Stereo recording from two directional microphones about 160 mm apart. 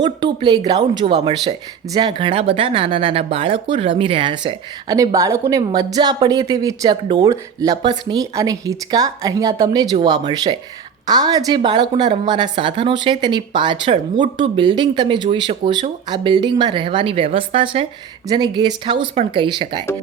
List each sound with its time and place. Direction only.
0.0 s speech: 30° right (ahead or behind)
4.9 s speech: 20° right (ahead or behind)